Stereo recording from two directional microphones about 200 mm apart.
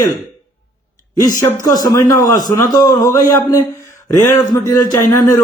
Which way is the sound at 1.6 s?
20° left (ahead or behind).